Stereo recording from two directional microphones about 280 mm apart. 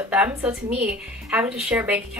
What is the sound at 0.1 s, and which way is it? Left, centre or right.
A woman's voice, centre.